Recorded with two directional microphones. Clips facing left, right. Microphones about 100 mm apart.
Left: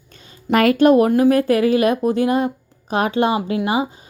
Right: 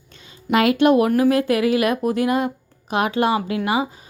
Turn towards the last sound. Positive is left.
turn(degrees=30)  # may be behind; listen again after turning